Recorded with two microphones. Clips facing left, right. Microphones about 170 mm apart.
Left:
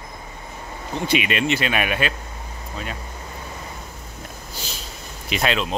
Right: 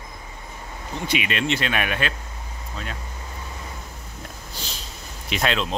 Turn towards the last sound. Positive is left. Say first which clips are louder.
# left 1 dB
turn(degrees=5)  # may be behind; listen again after turning